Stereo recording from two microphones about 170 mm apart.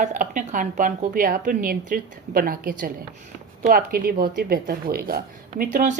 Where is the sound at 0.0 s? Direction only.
50° right (ahead or behind).